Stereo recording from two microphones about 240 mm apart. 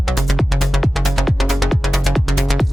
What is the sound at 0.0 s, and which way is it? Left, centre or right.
Music, centre.